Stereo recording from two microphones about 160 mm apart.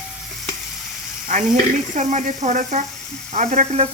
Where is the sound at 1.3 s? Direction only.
55° right (ahead or behind).